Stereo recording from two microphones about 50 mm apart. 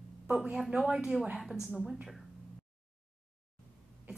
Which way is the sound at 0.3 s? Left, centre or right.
Centre.